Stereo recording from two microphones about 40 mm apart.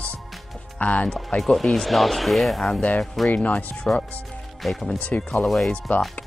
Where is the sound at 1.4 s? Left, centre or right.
Centre.